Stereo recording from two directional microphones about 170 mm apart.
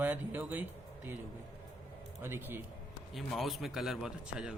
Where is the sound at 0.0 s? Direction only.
10° right (ahead or behind).